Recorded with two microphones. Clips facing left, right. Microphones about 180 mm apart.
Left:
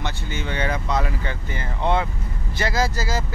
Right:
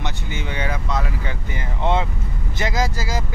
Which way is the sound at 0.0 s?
15° right (ahead or behind).